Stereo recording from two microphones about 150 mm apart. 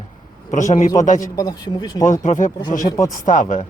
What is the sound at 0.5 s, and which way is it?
Speech, 55° left (ahead or behind).